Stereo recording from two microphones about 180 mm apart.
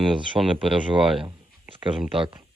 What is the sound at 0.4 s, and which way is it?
Speech, 20° right (ahead or behind).